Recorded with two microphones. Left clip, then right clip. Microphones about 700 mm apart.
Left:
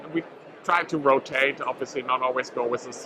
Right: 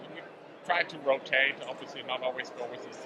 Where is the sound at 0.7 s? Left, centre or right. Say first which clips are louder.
Left 7 dB; left.